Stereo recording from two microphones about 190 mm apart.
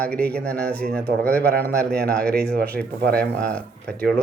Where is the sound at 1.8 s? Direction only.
55° right (ahead or behind).